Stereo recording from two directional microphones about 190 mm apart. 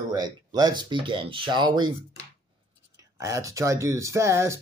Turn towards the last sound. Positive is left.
turn(degrees=-15)  # may be behind; listen again after turning